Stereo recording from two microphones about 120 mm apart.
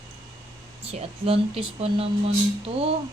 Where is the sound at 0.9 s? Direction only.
50° right (ahead or behind).